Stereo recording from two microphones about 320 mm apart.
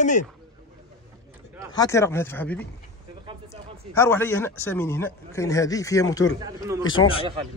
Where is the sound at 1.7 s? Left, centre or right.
Centre.